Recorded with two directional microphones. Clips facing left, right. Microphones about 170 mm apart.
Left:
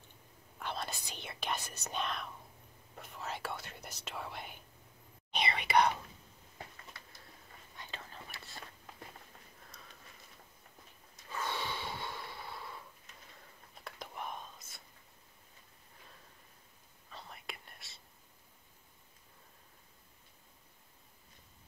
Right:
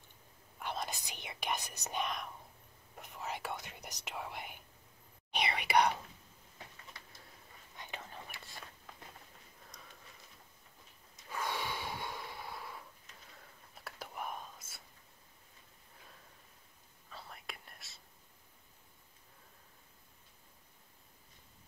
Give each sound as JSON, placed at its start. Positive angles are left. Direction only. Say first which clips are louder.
{"t": 0.6, "sound": "speech", "louder": "even", "side_deg": -15}
{"t": 7.7, "sound": "whispering", "louder": "right 2 dB", "side_deg": -15}
{"t": 9.7, "sound": "a sound", "louder": "right 1 dB", "side_deg": -15}
{"t": 11.2, "sound": "snort", "louder": "even", "side_deg": -10}
{"t": 13.8, "sound": "whispering", "louder": "even", "side_deg": -5}
{"t": 17.1, "sound": "whispering", "louder": "left 1 dB", "side_deg": 0}